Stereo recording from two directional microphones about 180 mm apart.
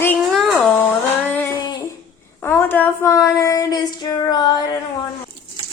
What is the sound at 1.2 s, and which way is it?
Female singing, 10° left (ahead or behind).